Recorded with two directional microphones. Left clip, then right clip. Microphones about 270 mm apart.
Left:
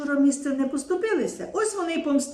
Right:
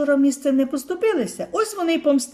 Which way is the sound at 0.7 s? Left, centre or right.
Right.